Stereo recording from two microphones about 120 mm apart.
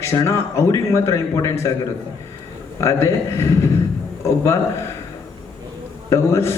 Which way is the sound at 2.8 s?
25° left (ahead or behind).